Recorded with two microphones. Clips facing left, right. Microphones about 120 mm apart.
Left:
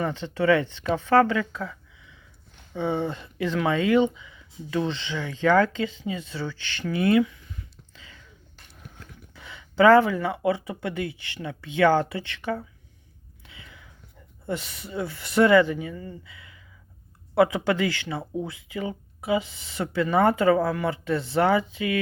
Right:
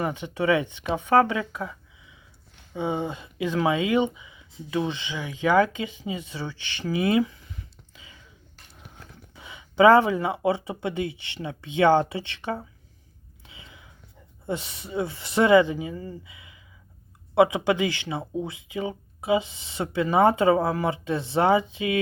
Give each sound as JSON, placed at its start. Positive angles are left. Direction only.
{"t": 0.0, "sound": "speech", "side_deg": -15}
{"t": 7.2, "sound": "speech", "side_deg": -30}
{"t": 7.9, "sound": "a sound", "side_deg": -15}
{"t": 9.3, "sound": "speech", "side_deg": -20}
{"t": 13.4, "sound": "whispering", "side_deg": -20}
{"t": 14.4, "sound": "speech", "side_deg": -20}
{"t": 16.2, "sound": "a sound", "side_deg": -20}
{"t": 17.3, "sound": "speech", "side_deg": -20}